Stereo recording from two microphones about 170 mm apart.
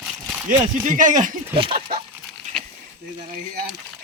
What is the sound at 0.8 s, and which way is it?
Speech, 50° right (ahead or behind).